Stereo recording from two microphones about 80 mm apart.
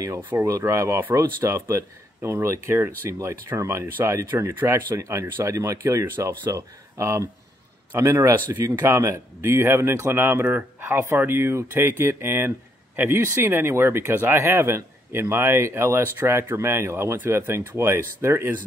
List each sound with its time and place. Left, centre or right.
0.4 s speech: right
8.5 s speech: right
8.8 s speech: right